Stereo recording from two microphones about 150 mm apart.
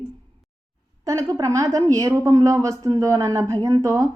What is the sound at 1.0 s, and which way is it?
A woman's voice, 20° right (ahead or behind).